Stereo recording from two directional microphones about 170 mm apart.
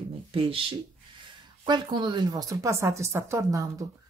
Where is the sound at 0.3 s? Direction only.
35° right (ahead or behind).